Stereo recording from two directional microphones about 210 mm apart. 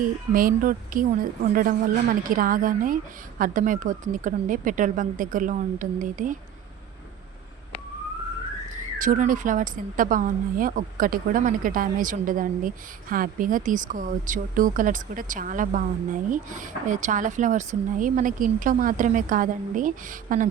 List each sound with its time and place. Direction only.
0.3 s a woman's voice: 40° right (ahead or behind)
9.0 s a woman's voice: 40° right (ahead or behind)